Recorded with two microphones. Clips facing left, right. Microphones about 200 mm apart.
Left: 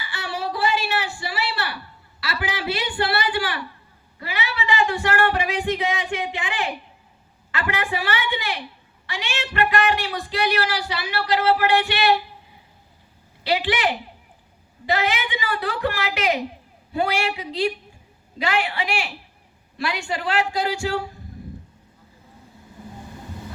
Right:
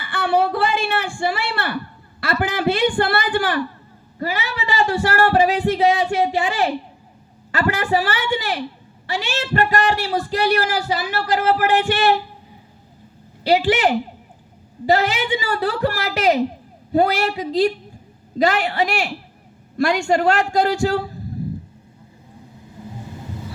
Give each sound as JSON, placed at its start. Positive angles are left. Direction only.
{"t": 0.0, "sound": "a sound", "side_deg": -55}
{"t": 2.2, "sound": "a man's voice", "side_deg": -50}
{"t": 13.4, "sound": "speech", "side_deg": -40}